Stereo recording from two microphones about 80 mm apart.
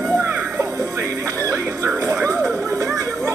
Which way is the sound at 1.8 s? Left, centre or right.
Right.